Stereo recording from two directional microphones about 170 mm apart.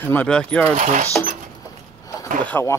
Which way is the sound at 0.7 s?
45° right (ahead or behind).